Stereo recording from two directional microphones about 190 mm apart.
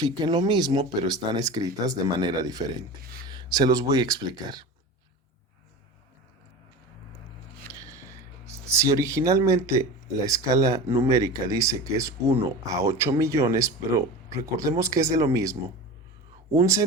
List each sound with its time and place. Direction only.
0.0 s speech: 25° right (ahead or behind)
7.7 s a sound: 15° right (ahead or behind)
8.4 s speech: 15° right (ahead or behind)